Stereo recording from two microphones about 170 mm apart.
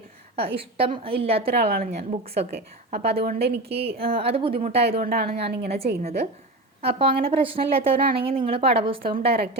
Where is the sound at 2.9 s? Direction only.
70° right (ahead or behind).